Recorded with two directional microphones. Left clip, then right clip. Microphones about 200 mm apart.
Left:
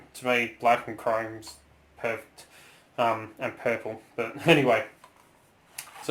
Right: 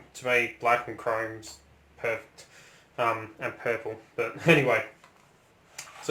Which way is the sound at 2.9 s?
30° left (ahead or behind).